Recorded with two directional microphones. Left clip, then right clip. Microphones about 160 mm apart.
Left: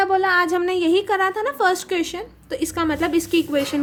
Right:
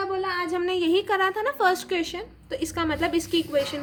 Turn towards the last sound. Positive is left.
turn(degrees=35)  # may be behind; listen again after turning